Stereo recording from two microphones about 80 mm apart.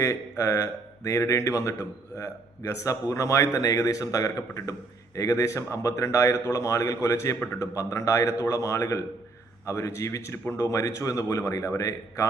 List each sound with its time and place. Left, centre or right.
0.0 s a man's voice: left